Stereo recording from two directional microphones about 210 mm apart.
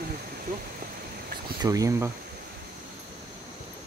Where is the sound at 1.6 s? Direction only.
15° right (ahead or behind).